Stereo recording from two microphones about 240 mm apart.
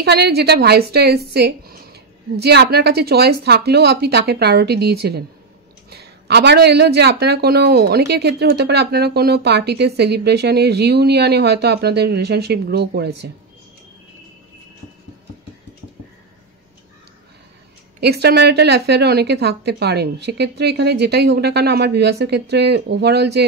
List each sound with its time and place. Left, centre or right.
0.0 s a woman's voice: right
18.0 s a woman's voice: right